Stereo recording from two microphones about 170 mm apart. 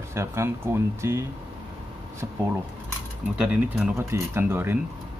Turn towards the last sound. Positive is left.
turn(degrees=-15)  # may be behind; listen again after turning